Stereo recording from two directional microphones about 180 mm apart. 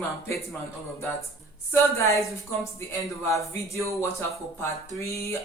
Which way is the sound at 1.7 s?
15° left (ahead or behind).